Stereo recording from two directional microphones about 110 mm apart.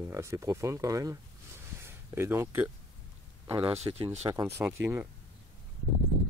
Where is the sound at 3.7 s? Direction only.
65° right (ahead or behind).